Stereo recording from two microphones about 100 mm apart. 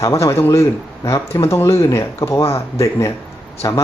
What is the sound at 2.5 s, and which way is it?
Speech, 75° left (ahead or behind).